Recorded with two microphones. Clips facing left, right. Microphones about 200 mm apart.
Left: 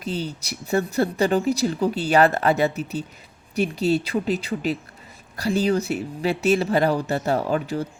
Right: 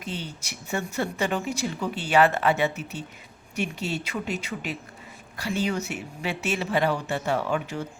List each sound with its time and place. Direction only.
0.0 s speech: 35° left (ahead or behind)